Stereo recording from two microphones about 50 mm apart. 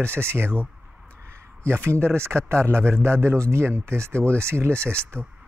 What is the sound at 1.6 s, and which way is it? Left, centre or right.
Speech, right.